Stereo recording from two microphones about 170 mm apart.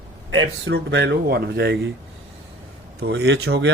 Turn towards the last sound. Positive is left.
turn(degrees=-90)